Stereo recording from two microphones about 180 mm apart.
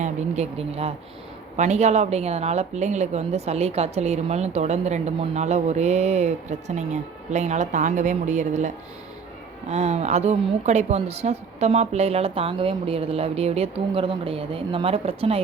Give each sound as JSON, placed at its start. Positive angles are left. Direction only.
{"t": 0.0, "sound": "speech", "side_deg": -35}